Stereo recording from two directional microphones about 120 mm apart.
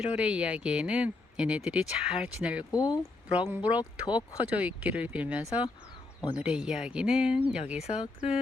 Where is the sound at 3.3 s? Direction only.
15° right (ahead or behind).